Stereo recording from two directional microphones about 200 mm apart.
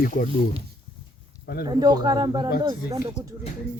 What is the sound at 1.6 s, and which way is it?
Speech, 20° right (ahead or behind).